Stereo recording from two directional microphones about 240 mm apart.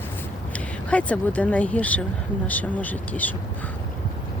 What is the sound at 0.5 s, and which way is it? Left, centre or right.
Speech, centre.